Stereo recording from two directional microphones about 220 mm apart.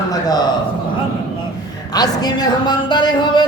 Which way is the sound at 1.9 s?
15° left (ahead or behind).